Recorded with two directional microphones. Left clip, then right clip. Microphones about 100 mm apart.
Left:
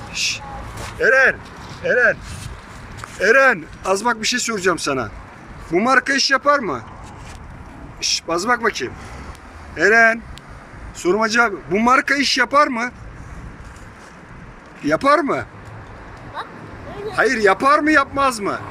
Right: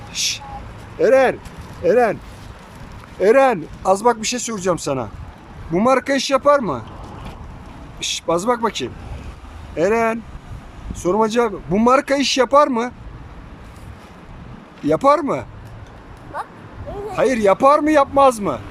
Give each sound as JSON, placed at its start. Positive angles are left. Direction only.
{"t": 0.1, "sound": "a sound", "side_deg": -70}
{"t": 0.9, "sound": "speech", "side_deg": -55}
{"t": 3.2, "sound": "speech", "side_deg": -50}
{"t": 3.4, "sound": "speech", "side_deg": -25}
{"t": 5.7, "sound": "a man's voice", "side_deg": -35}
{"t": 8.0, "sound": "a man's voice", "side_deg": -30}
{"t": 14.8, "sound": "speech", "side_deg": -25}
{"t": 17.2, "sound": "a man's voice", "side_deg": -30}